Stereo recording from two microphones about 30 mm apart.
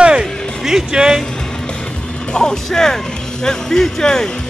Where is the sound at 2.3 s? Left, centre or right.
Centre.